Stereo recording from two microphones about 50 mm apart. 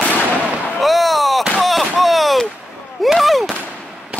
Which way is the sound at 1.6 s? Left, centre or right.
Centre.